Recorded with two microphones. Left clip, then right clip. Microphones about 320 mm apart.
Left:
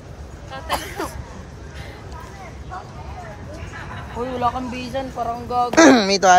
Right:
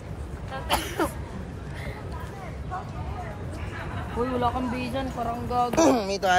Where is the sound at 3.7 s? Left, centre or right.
Left.